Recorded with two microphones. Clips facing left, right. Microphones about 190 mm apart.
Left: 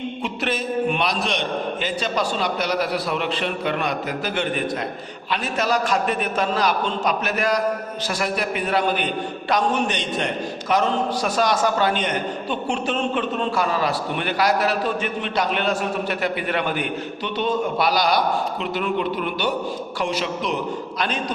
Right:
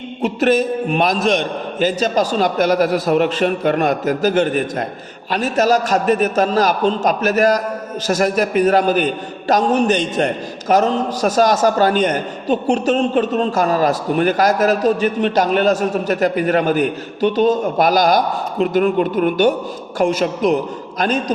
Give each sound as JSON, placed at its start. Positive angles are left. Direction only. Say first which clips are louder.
{"t": 0.2, "sound": "a man's voice", "louder": "right 14 dB", "side_deg": -45}